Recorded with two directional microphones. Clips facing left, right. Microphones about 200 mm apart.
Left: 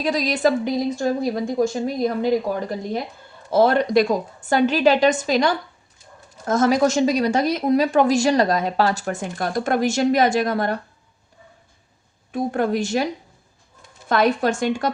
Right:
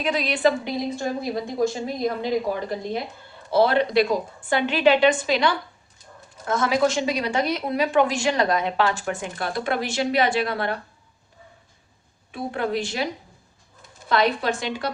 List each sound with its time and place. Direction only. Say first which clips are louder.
0.0 s a woman's voice: left 2 dB; 40° left (ahead or behind)
12.3 s a woman's voice: left 5 dB; 45° left (ahead or behind)
14.1 s a woman's voice: left 3 dB; 45° left (ahead or behind)